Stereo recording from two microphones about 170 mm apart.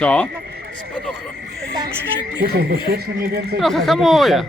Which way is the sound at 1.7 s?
25° right (ahead or behind).